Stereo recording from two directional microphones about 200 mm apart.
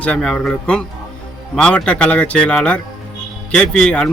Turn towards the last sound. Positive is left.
turn(degrees=0)  # may be behind; listen again after turning